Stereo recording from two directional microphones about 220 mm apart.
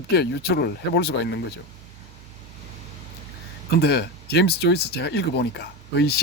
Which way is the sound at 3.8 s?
50° left (ahead or behind).